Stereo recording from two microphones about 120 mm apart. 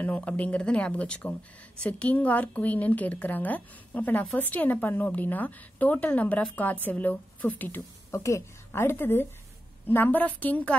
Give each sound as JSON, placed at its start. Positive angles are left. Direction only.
{"t": 0.0, "sound": "a woman's voice", "side_deg": 10}